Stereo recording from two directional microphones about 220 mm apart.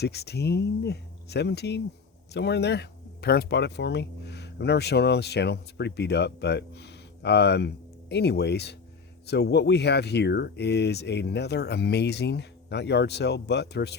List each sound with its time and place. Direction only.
0.0 s speech: 45° left (ahead or behind)